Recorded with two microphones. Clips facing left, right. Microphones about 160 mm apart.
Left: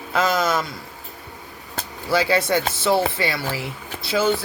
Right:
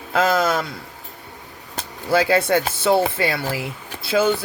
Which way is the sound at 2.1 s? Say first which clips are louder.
Right 2 dB; 50° right (ahead or behind).